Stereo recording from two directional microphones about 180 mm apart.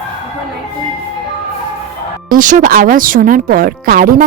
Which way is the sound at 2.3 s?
45° right (ahead or behind).